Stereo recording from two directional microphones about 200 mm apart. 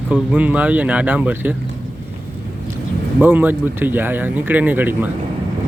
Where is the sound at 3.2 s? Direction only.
10° right (ahead or behind).